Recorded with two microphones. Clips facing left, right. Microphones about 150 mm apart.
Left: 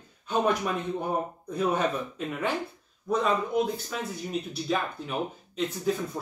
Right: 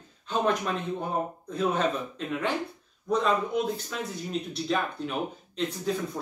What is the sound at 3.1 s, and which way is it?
Speech, 5° left (ahead or behind).